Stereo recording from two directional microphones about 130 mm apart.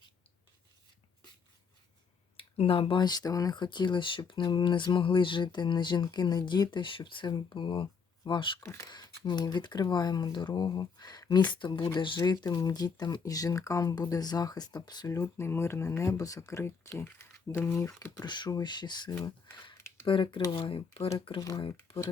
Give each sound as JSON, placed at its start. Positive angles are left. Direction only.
{"t": 2.3, "sound": "speech", "side_deg": 45}
{"t": 8.6, "sound": "speech", "side_deg": 30}
{"t": 19.7, "sound": "a sound", "side_deg": 20}
{"t": 20.1, "sound": "speech", "side_deg": 40}
{"t": 21.2, "sound": "speech", "side_deg": 30}